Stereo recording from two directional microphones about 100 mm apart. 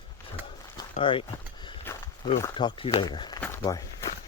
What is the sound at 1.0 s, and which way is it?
Speech, 60° left (ahead or behind).